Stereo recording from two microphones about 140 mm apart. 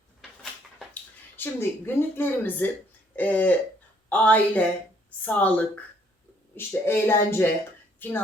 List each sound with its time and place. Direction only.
1.4 s speech: 15° left (ahead or behind)